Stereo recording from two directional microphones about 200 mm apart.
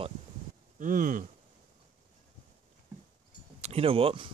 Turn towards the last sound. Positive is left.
turn(degrees=-25)  # may be behind; listen again after turning